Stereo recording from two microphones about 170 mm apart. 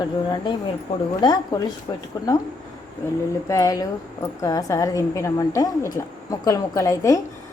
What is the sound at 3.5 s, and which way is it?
A woman's voice, 20° left (ahead or behind).